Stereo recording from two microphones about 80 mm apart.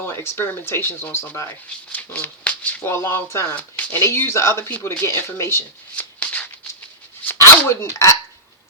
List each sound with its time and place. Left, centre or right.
0.0 s speech: left
2.8 s speech: left
3.5 s speech: centre
4.0 s speech: left
7.6 s speech: left